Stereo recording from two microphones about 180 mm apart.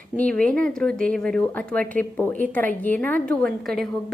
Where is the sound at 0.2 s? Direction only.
5° left (ahead or behind).